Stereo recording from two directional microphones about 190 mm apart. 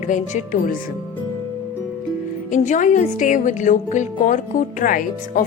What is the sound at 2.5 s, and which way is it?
Speech, 40° left (ahead or behind).